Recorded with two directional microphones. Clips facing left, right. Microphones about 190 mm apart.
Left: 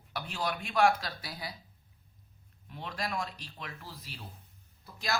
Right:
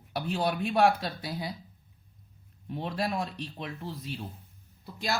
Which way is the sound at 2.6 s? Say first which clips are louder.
Right 7 dB; 30° right (ahead or behind).